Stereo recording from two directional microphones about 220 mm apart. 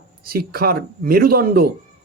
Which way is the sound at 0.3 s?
45° right (ahead or behind).